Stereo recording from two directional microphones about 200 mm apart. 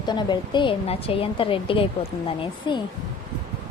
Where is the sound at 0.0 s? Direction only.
20° left (ahead or behind).